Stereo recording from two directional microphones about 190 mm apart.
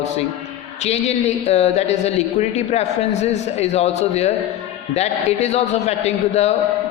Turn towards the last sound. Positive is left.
turn(degrees=35)  # may be behind; listen again after turning